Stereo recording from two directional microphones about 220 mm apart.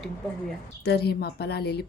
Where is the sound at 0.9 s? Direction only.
45° left (ahead or behind).